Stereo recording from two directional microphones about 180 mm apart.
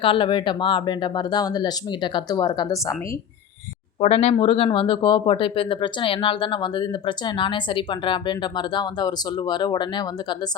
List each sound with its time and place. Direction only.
0.0 s speech: 30° left (ahead or behind)
4.0 s speech: 35° left (ahead or behind)